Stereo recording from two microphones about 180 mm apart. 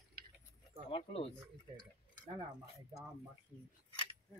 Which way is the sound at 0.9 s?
30° left (ahead or behind).